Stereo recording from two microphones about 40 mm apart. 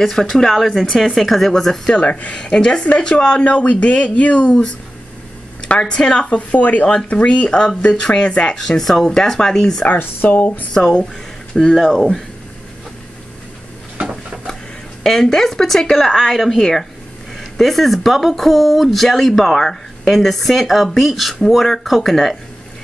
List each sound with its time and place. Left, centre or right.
0.0 s speech: centre
2.0 s speech: left
2.4 s speech: left
5.9 s speech: centre
6.2 s speech: left
8.5 s speech: centre
9.9 s speech: left
11.7 s speech: centre
15.0 s speech: centre